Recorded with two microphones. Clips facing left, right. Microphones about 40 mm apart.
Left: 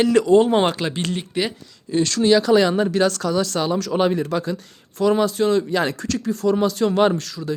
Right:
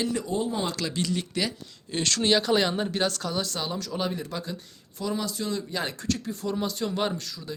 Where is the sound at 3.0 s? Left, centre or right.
Left.